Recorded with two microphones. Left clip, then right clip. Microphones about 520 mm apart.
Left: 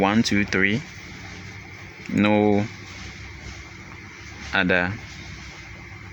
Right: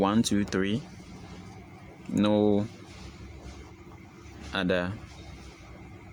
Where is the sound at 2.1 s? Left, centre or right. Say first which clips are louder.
Left 5 dB; right.